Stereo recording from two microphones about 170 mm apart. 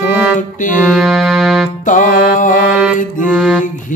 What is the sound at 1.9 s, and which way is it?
Music, 50° left (ahead or behind).